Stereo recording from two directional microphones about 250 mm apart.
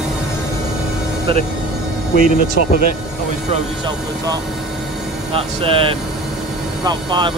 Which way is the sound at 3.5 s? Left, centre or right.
Centre.